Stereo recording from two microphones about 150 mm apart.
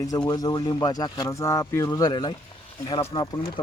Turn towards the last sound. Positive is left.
turn(degrees=30)  # may be behind; listen again after turning